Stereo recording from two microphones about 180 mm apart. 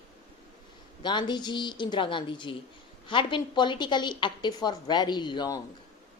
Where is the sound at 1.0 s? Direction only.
25° left (ahead or behind).